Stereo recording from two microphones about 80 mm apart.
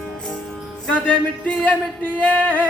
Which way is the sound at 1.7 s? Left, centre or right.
Left.